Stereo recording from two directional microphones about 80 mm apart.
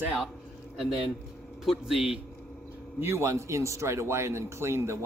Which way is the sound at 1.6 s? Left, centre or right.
Centre.